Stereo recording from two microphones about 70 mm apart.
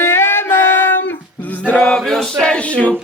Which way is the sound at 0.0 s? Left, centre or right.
Left.